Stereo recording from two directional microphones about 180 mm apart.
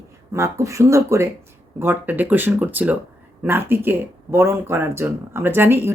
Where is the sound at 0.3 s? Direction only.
15° right (ahead or behind).